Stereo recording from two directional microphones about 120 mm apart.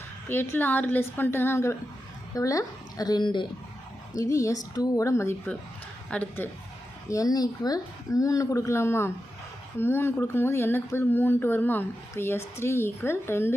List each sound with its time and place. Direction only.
0.3 s a woman's voice: 15° left (ahead or behind); by 3.4 s 40° left (ahead or behind)
4.1 s speech: 25° left (ahead or behind)
6.1 s a woman's voice: 15° left (ahead or behind)
7.1 s speech: 30° left (ahead or behind)